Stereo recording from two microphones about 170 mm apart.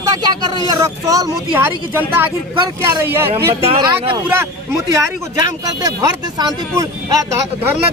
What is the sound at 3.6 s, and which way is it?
Speech, 35° right (ahead or behind).